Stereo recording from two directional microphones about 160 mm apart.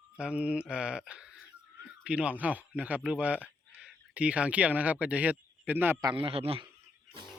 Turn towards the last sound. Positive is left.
turn(degrees=-35)  # may be behind; listen again after turning